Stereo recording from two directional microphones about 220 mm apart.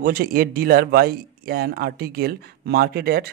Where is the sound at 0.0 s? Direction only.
40° right (ahead or behind).